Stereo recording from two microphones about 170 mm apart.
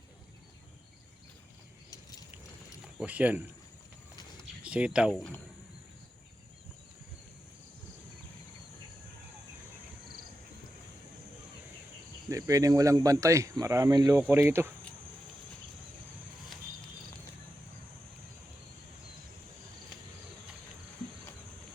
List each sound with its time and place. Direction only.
1.9 s a sound: 25° left (ahead or behind)
2.8 s speech: 5° right (ahead or behind)
4.6 s speech: 5° right (ahead or behind)
12.3 s speech: 20° right (ahead or behind)